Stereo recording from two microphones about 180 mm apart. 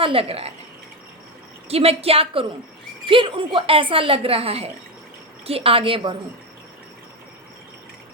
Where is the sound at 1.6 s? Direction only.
35° right (ahead or behind).